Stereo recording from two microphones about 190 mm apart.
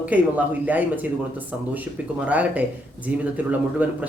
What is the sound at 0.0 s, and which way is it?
Speech, 10° right (ahead or behind).